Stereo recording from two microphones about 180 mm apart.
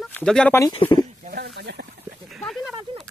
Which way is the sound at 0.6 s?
25° left (ahead or behind).